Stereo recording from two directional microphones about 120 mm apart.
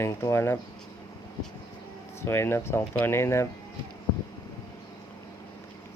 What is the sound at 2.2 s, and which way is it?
Speech, 20° left (ahead or behind).